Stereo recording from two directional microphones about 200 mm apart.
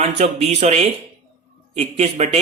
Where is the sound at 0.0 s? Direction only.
35° right (ahead or behind).